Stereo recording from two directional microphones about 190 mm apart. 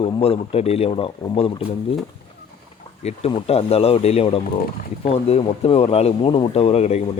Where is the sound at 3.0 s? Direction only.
35° left (ahead or behind).